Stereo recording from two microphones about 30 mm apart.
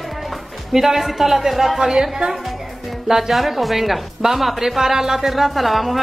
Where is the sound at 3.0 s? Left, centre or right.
Centre.